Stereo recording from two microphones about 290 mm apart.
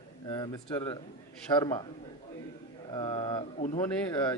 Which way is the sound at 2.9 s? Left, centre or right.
Centre.